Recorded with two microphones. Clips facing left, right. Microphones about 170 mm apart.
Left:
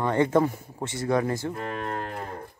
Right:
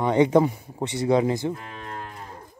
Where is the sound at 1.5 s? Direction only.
60° left (ahead or behind).